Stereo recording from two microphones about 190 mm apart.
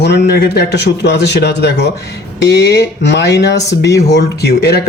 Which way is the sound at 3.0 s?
65° left (ahead or behind).